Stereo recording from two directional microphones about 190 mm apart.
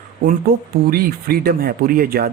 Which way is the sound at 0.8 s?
55° right (ahead or behind).